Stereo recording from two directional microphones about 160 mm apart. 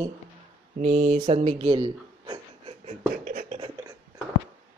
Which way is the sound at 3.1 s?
60° right (ahead or behind).